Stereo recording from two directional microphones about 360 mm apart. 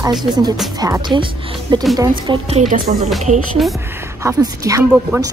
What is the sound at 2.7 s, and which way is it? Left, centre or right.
Speech, right.